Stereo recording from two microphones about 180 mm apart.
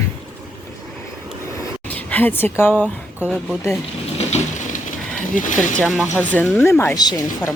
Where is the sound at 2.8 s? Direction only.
5° right (ahead or behind).